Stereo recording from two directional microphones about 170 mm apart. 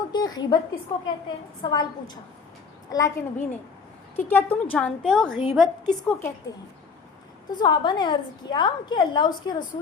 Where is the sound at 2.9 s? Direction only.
20° left (ahead or behind); by 6.1 s centre (ahead or behind).